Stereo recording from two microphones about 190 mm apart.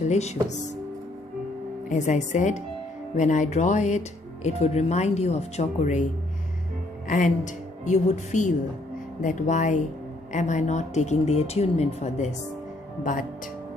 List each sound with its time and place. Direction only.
0.0 s speech: 35° left (ahead or behind)
1.9 s speech: 40° left (ahead or behind)
7.1 s speech: 40° left (ahead or behind)